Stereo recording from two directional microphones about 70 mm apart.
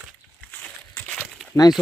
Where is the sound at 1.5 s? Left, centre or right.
Left.